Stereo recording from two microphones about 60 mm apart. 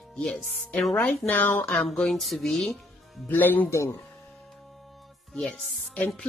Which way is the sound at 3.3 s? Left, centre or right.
Left.